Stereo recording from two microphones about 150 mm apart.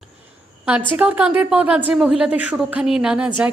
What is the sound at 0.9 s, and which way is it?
A woman's voice, 10° right (ahead or behind).